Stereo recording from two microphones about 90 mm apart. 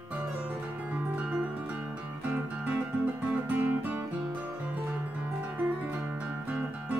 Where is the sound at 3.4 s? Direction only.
20° right (ahead or behind).